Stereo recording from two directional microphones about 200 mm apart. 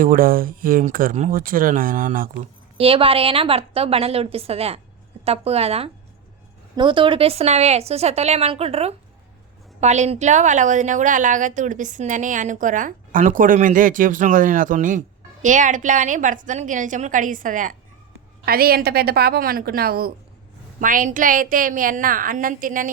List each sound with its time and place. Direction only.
0.0 s speech: 45° right (ahead or behind)
2.7 s a woman's voice: 30° right (ahead or behind)